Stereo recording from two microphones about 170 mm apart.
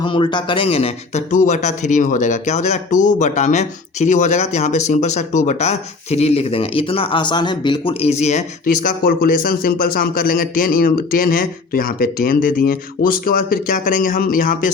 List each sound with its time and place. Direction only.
0.0 s speech: 30° left (ahead or behind); by 14.7 s 50° left (ahead or behind)